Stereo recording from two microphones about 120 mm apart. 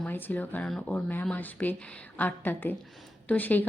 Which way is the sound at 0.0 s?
15° left (ahead or behind).